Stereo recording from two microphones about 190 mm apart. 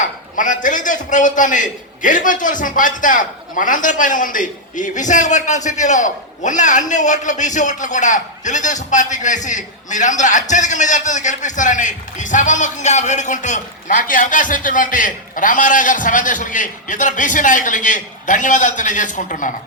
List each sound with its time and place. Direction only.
0.0 s a man's voice: 40° left (ahead or behind)